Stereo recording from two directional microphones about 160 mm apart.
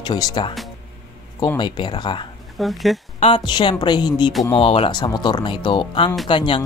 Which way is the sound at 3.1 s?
35° left (ahead or behind).